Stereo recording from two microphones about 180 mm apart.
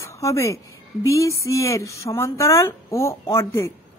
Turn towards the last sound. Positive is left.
turn(degrees=15)  # may be behind; listen again after turning